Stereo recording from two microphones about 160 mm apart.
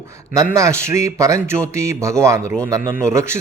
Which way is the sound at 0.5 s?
20° right (ahead or behind).